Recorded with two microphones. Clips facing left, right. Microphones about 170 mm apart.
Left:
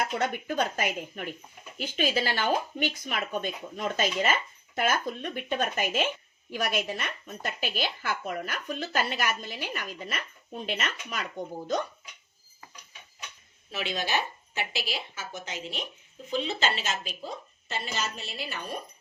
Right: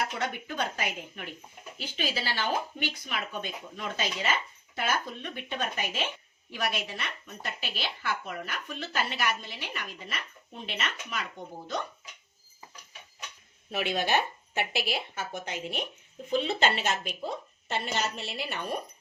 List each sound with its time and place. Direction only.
0.2 s speech: 45° left (ahead or behind)
13.7 s a woman's voice: 55° right (ahead or behind)